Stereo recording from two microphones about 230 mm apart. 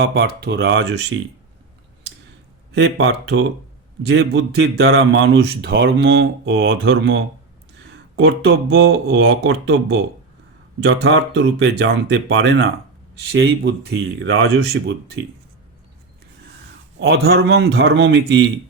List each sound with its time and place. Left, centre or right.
0.0 s speech: right
2.7 s speech: right
7.9 s a sound: right
8.7 s speech: right
17.0 s speech: right